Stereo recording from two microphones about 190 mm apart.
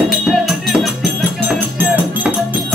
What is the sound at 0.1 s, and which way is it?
Music, centre (ahead or behind).